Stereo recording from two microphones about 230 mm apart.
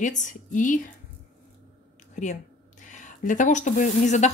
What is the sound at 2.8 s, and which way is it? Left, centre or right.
Speech, left.